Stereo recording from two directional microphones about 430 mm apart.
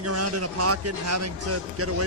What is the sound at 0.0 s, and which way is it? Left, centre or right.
A man's voice, right.